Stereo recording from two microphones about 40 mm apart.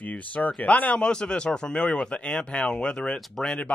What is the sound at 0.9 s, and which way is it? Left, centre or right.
Speech, left.